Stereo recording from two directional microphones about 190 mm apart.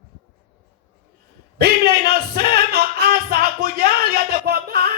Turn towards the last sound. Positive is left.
turn(degrees=-50)  # may be behind; listen again after turning